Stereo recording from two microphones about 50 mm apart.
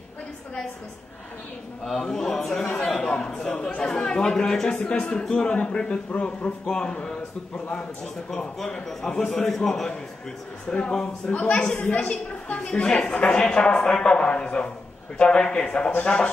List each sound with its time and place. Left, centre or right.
1.9 s a man's voice: centre
11.4 s a man's voice: left; by 16.3 s centre